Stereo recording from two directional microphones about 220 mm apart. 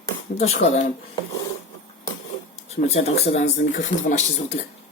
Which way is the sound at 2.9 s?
30° left (ahead or behind).